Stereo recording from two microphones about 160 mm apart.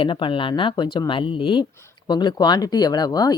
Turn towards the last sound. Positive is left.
turn(degrees=25)  # may be behind; listen again after turning